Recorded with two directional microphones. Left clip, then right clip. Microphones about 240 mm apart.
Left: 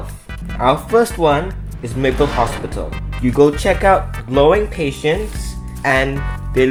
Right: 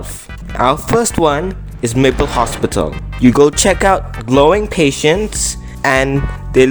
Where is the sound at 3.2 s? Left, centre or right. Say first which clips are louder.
Right 3 dB; right.